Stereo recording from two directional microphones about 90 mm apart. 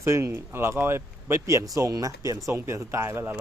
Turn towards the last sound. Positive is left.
turn(degrees=-30)  # may be behind; listen again after turning